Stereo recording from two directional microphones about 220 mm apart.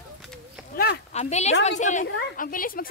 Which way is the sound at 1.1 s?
30° left (ahead or behind).